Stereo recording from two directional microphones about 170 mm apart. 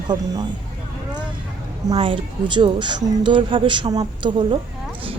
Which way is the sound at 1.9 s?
30° right (ahead or behind).